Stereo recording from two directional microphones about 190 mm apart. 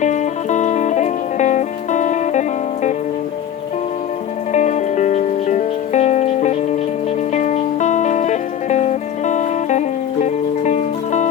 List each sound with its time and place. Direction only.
0.0 s music: 40° left (ahead or behind)
4.5 s music: 40° left (ahead or behind)